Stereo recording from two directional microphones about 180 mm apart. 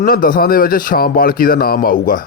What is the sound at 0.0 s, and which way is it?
Speech, 55° left (ahead or behind).